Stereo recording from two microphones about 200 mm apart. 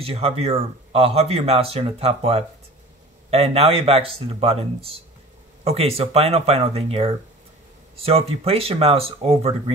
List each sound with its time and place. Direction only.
0.0 s speech: 30° right (ahead or behind)